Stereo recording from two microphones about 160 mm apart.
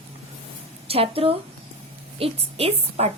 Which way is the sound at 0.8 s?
35° right (ahead or behind).